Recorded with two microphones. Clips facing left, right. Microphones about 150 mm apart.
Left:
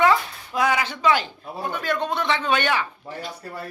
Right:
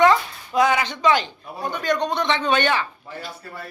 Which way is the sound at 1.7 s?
5° left (ahead or behind).